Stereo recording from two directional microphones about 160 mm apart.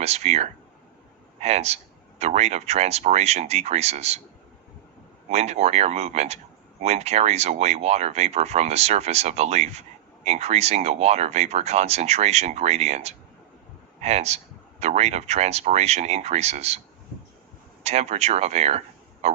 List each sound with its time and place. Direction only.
0.0 s speech: 40° right (ahead or behind)
5.3 s speech: 40° right (ahead or behind)
17.8 s speech: 45° right (ahead or behind)